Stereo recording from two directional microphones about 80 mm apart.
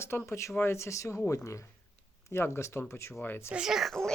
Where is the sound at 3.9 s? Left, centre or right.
Centre.